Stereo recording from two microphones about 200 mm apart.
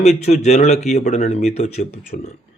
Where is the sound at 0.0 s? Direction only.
35° left (ahead or behind).